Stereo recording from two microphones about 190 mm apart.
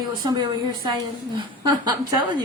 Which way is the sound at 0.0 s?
20° right (ahead or behind).